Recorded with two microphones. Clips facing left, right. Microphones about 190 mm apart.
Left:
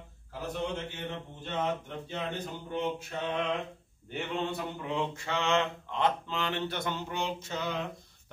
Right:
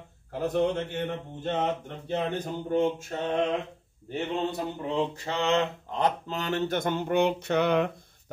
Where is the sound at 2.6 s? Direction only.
45° right (ahead or behind).